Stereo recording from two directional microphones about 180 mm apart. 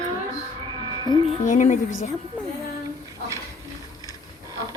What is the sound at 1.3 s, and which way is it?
Speech, 45° left (ahead or behind).